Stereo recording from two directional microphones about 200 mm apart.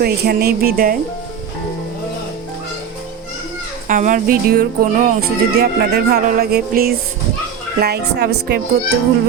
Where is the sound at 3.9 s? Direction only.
40° right (ahead or behind).